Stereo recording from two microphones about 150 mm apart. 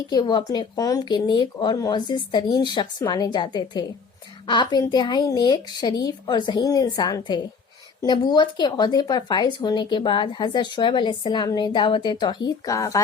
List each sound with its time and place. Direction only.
0.1 s speech: 30° left (ahead or behind)